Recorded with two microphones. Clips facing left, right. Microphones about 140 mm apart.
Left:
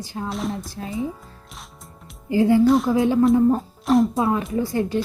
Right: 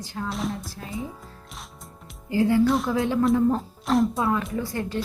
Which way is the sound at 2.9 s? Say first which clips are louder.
Left 5 dB; 20° left (ahead or behind).